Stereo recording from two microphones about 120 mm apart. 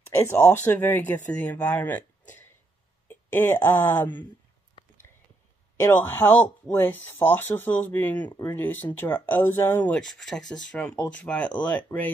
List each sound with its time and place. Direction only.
0.1 s speech: 20° left (ahead or behind)
5.8 s speech: 15° left (ahead or behind)